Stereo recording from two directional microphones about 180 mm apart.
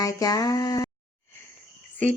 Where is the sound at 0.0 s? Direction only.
20° left (ahead or behind).